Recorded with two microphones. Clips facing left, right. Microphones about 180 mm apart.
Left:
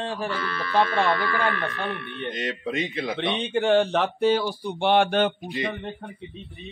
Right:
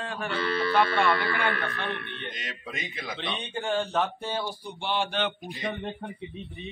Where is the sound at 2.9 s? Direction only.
20° left (ahead or behind).